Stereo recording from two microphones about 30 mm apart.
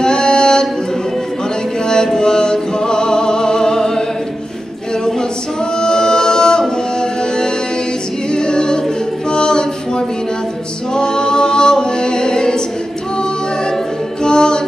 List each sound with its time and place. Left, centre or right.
0.0 s a capella: left
2.1 s music: left
5.8 s music: left
8.3 s a capella: left
14.2 s music: left